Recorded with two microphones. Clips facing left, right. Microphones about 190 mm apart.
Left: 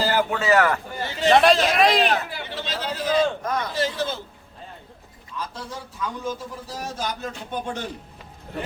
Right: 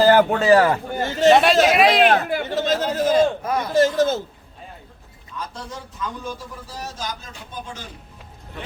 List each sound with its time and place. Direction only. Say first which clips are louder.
0.0 s speech: right 8 dB; 50° right (ahead or behind); by 0.8 s 30° right (ahead or behind)
0.9 s a man's voice: right 7 dB; 45° right (ahead or behind)
1.3 s speech: right 2 dB; centre (ahead or behind)
2.0 s speech: right 6 dB; 55° right (ahead or behind)
3.4 s speech: right 3 dB; 10° right (ahead or behind)
3.7 s speech: right 8 dB; 45° right (ahead or behind)
6.7 s speech: left 2 dB; 50° left (ahead or behind)